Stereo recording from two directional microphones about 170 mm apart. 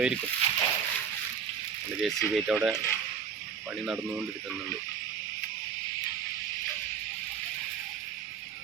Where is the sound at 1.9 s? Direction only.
Centre (ahead or behind).